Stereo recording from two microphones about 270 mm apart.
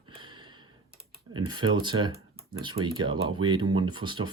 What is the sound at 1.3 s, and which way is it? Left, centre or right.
Speech, centre.